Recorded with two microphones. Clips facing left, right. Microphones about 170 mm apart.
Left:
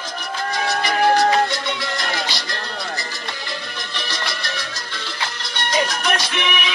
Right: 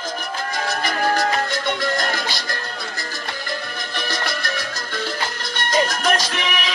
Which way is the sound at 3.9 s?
50° right (ahead or behind).